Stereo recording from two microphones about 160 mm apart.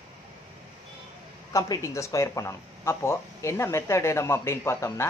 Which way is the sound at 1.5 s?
20° left (ahead or behind).